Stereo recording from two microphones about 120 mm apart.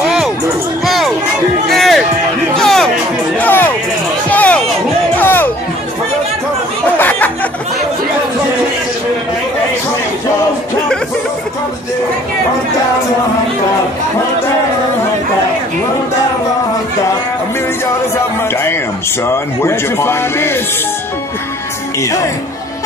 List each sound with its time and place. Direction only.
0.8 s music: centre (ahead or behind)
3.3 s music: 15° left (ahead or behind)
5.1 s a sound: 15° left (ahead or behind)
7.0 s chatter: 15° left (ahead or behind)
19.2 s speech: 20° left (ahead or behind)